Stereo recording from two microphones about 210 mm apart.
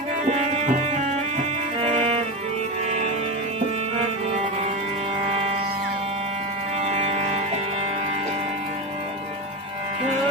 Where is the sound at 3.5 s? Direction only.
25° right (ahead or behind).